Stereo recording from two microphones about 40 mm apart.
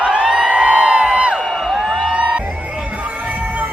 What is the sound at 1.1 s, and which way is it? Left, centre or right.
Music, right.